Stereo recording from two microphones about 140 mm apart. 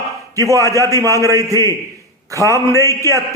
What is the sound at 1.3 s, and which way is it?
Speech, 25° right (ahead or behind).